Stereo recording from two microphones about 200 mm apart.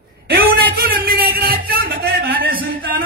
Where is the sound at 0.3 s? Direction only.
50° right (ahead or behind).